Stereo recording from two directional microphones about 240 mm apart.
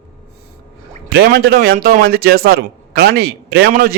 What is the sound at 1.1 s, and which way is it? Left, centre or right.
A man's voice, right.